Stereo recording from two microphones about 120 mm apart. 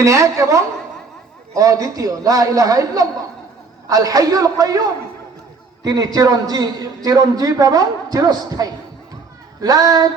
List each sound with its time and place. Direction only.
0.0 s a man's voice: 25° right (ahead or behind)
5.8 s a man's voice: 35° right (ahead or behind)